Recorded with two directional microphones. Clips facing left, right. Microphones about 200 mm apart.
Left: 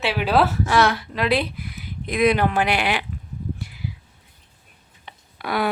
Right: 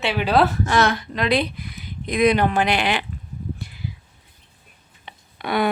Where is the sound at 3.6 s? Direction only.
10° left (ahead or behind).